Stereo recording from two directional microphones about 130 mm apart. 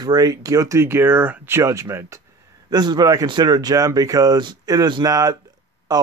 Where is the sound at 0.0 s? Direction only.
30° right (ahead or behind).